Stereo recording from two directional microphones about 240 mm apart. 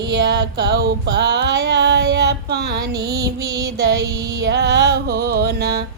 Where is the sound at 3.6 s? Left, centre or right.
Right.